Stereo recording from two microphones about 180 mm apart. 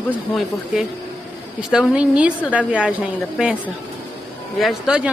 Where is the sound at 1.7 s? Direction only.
5° right (ahead or behind).